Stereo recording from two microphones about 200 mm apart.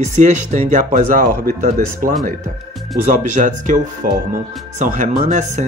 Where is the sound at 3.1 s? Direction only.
40° right (ahead or behind).